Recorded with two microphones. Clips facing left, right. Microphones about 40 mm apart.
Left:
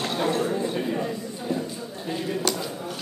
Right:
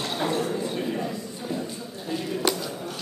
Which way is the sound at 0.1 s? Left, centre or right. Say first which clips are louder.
Left 1 dB; centre.